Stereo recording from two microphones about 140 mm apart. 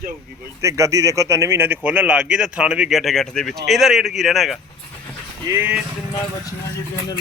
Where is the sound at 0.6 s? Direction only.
20° right (ahead or behind); by 4.6 s centre (ahead or behind).